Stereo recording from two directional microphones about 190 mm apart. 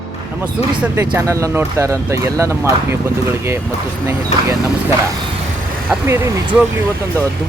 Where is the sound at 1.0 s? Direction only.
15° right (ahead or behind).